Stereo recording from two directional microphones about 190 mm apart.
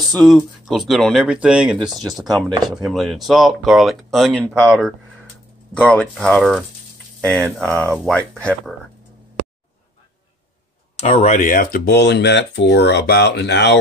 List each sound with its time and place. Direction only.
0.1 s speech: centre (ahead or behind)
11.1 s speech: 35° left (ahead or behind); by 13.7 s 65° left (ahead or behind)